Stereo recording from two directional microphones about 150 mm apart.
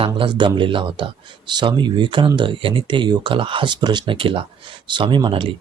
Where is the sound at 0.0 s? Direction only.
35° right (ahead or behind).